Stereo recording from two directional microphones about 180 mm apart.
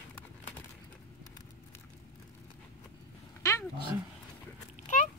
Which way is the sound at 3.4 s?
15° left (ahead or behind).